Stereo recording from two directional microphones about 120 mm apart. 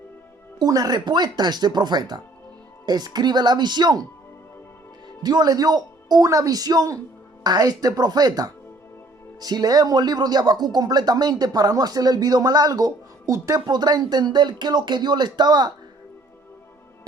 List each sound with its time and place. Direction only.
0.6 s speech: 30° right (ahead or behind)
5.2 s speech: 35° right (ahead or behind)
13.7 s speech: 35° right (ahead or behind)